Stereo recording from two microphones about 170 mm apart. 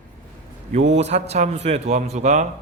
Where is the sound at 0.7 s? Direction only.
40° right (ahead or behind).